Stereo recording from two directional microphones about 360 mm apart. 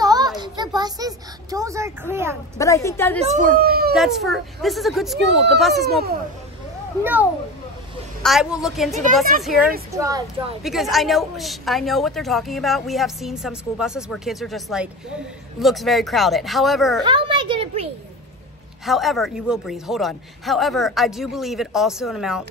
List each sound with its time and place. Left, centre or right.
0.0 s a sound: centre
2.5 s a woman's voice: centre
3.5 s speech: right
3.9 s a woman's voice: centre
7.0 s a woman's voice: centre
17.0 s a child's voice: centre
18.9 s a woman's voice: centre